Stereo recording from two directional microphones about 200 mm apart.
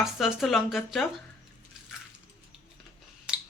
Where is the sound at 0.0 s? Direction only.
Centre (ahead or behind).